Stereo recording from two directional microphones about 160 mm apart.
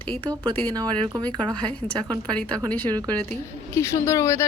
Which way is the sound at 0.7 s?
25° right (ahead or behind).